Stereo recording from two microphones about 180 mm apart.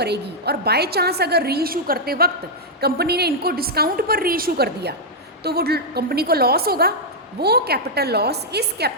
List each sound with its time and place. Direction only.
0.0 s a woman's voice: 65° right (ahead or behind)